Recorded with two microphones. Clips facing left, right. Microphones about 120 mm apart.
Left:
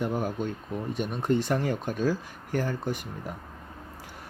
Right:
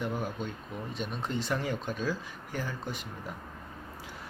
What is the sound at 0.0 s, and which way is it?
Speech, 45° left (ahead or behind).